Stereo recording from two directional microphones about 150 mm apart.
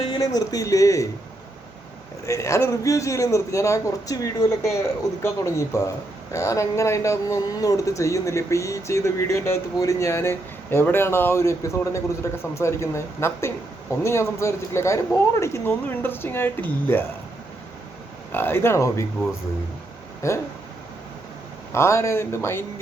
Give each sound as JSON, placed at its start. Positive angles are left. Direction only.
{"t": 0.1, "sound": "speech", "side_deg": 25}
{"t": 2.2, "sound": "speech", "side_deg": 20}
{"t": 18.3, "sound": "speech", "side_deg": 15}
{"t": 20.2, "sound": "speech", "side_deg": 20}
{"t": 21.7, "sound": "speech", "side_deg": 20}